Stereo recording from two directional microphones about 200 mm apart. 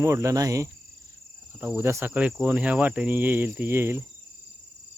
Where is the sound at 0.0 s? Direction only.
15° right (ahead or behind).